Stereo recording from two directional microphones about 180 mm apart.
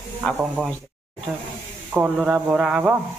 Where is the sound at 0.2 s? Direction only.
5° right (ahead or behind).